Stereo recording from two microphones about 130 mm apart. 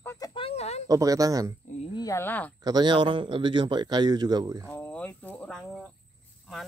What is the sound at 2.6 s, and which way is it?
A man's voice, 35° right (ahead or behind).